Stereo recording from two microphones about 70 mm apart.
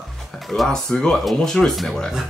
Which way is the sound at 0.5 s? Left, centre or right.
Centre.